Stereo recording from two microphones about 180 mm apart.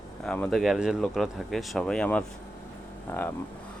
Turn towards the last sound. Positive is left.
turn(degrees=10)  # may be behind; listen again after turning